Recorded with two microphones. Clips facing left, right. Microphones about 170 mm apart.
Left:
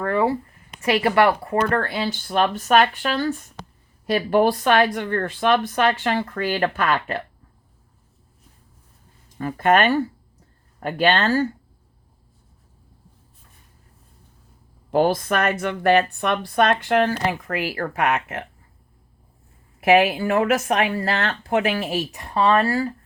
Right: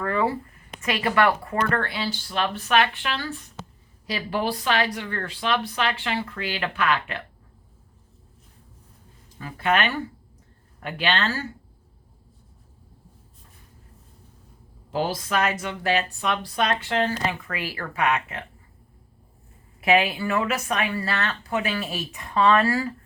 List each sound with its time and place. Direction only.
0.8 s speech: 40° left (ahead or behind)
9.4 s speech: 50° left (ahead or behind)
14.8 s speech: 55° left (ahead or behind)
17.4 s speech: 45° left (ahead or behind)
19.8 s speech: 75° left (ahead or behind)
20.1 s speech: 50° left (ahead or behind)
21.9 s speech: 40° left (ahead or behind)